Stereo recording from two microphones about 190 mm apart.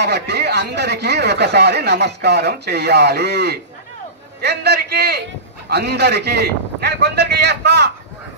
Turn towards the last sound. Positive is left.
turn(degrees=-60)  # may be behind; listen again after turning